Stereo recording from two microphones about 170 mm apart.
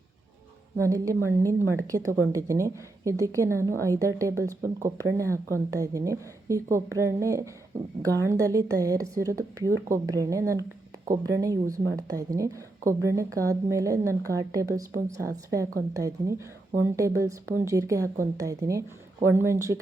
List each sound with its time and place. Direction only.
0.8 s a woman's voice: 20° right (ahead or behind)